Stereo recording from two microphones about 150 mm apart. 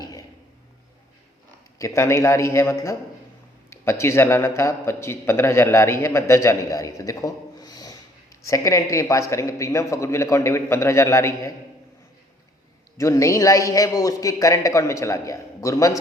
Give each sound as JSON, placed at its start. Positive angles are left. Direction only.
{"t": 1.8, "sound": "a man's voice", "side_deg": 20}
{"t": 13.0, "sound": "a man's voice", "side_deg": 20}